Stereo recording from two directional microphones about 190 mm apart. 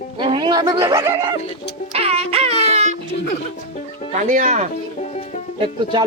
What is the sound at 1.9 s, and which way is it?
Music, 30° right (ahead or behind).